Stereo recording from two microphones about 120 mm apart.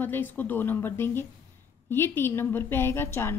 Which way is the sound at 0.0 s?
15° left (ahead or behind).